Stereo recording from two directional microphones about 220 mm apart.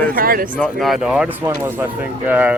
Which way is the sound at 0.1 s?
40° right (ahead or behind).